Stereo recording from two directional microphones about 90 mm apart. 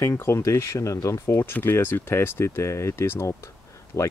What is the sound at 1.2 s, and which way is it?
Speech, 25° left (ahead or behind).